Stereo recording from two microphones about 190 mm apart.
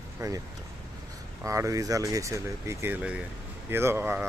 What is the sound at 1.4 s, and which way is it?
Speech, 15° right (ahead or behind).